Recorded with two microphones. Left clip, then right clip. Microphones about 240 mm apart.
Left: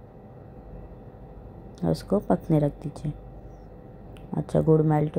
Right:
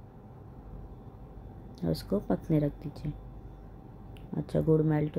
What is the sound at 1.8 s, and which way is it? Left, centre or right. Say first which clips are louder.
Speech: left 6 dB; centre.